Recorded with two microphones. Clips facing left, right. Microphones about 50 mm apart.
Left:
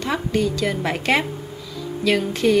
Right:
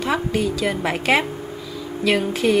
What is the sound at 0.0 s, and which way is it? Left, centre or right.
A woman's voice, centre.